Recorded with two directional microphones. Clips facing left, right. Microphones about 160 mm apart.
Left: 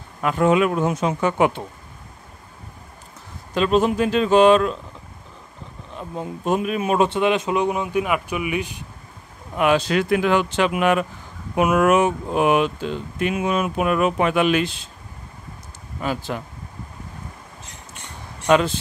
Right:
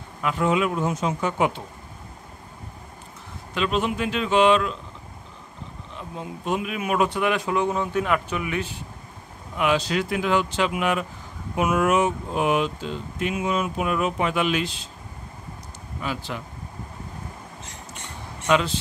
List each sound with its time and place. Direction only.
0.2 s speech: 50° left (ahead or behind)
3.5 s speech: 40° left (ahead or behind)
5.9 s speech: 45° left (ahead or behind)
6.8 s a man's voice: 30° left (ahead or behind)
9.6 s speech: 55° left (ahead or behind)
16.0 s speech: 45° left (ahead or behind)
18.5 s speech: 50° left (ahead or behind)